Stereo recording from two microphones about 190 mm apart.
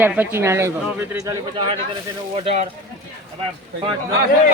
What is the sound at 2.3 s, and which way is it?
Speech, 30° right (ahead or behind).